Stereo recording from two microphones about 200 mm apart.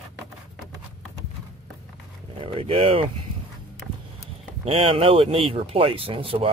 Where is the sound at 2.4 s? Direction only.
30° right (ahead or behind).